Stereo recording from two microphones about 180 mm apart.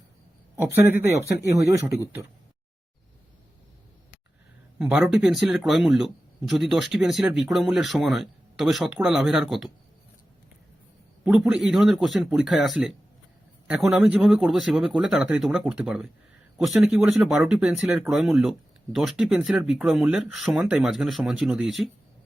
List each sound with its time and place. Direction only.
0.5 s speech: 10° right (ahead or behind)
4.8 s speech: 5° right (ahead or behind)
11.2 s speech: 5° right (ahead or behind)